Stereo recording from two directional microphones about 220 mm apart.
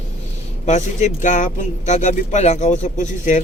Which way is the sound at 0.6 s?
30° left (ahead or behind).